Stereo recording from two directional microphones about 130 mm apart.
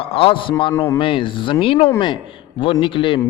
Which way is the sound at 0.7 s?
20° left (ahead or behind).